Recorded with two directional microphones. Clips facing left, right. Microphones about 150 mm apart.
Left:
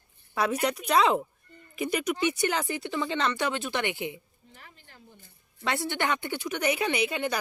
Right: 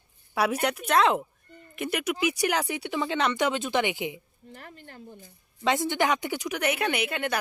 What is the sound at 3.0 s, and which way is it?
Speech, 10° right (ahead or behind).